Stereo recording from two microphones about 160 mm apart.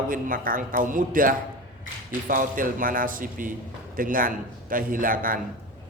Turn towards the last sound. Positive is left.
turn(degrees=-60)  # may be behind; listen again after turning